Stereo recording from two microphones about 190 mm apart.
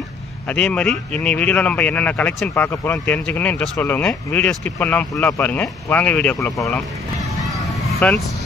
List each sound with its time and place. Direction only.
0.5 s speech: 5° left (ahead or behind)
8.0 s speech: 5° left (ahead or behind)